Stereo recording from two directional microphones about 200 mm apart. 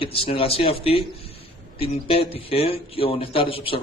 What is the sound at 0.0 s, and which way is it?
Speech, 25° left (ahead or behind).